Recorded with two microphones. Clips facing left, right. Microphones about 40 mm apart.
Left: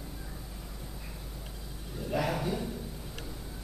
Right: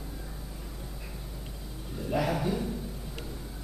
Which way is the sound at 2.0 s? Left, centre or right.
Centre.